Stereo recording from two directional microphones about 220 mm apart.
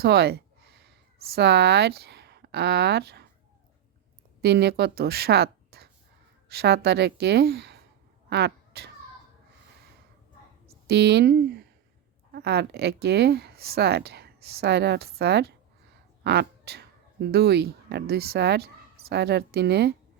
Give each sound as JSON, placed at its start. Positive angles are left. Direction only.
{"t": 0.0, "sound": "speech", "side_deg": -45}
{"t": 4.4, "sound": "a woman's voice", "side_deg": -50}
{"t": 8.3, "sound": "cat", "side_deg": -50}
{"t": 10.8, "sound": "speech", "side_deg": -50}